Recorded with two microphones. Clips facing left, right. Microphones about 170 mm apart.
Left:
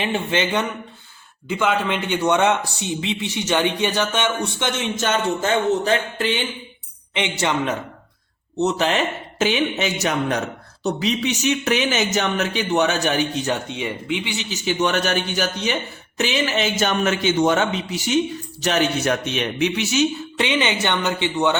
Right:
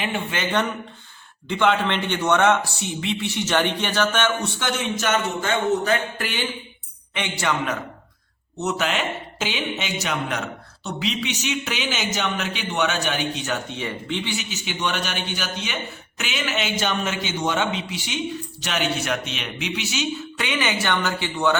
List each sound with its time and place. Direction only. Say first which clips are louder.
0.0 s speech: left 5 dB; 25° left (ahead or behind)
1.5 s a man's voice: even; 5° left (ahead or behind); by 7.8 s 25° left (ahead or behind)
9.7 s a man's voice: left 5 dB; 45° left (ahead or behind)
13.7 s a man's voice: left 3 dB; 15° left (ahead or behind)
14.3 s speech: left 7 dB; 40° left (ahead or behind)
16.8 s a man's voice: left 6 dB; 55° left (ahead or behind)
20.4 s speech: left 4 dB; 25° left (ahead or behind)